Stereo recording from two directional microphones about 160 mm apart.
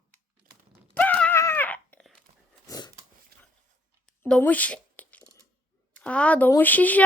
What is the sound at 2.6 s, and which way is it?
Dog, 25° left (ahead or behind).